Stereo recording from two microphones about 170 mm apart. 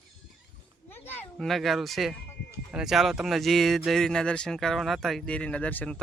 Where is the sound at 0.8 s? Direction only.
10° left (ahead or behind).